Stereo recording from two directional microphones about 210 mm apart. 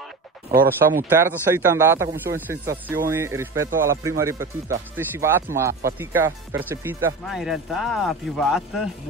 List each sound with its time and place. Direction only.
0.5 s speech: 45° right (ahead or behind)
1.0 s speech: 10° right (ahead or behind)